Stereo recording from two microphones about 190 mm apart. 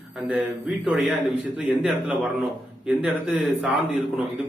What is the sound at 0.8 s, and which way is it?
Speech, 5° right (ahead or behind).